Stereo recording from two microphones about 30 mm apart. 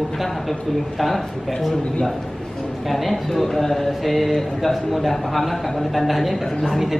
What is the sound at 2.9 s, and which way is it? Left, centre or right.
A man's voice, centre.